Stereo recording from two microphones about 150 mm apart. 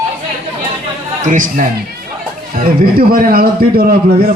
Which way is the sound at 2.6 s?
70° right (ahead or behind).